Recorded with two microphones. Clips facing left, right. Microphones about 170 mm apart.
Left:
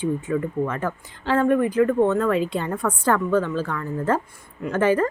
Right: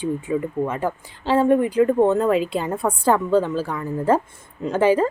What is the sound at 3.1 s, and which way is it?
A woman's voice, 15° right (ahead or behind).